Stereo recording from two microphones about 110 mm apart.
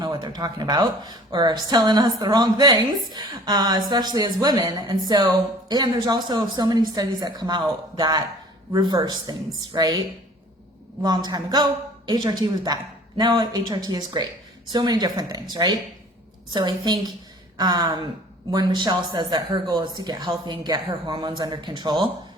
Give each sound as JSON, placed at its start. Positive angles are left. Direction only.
{"t": 0.0, "sound": "speech", "side_deg": -40}
{"t": 11.0, "sound": "speech", "side_deg": -40}